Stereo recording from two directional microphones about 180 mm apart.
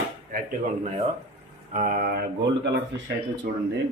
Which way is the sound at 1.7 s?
45° right (ahead or behind).